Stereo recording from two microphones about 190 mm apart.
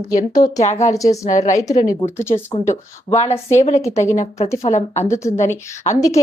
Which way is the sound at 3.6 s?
35° left (ahead or behind).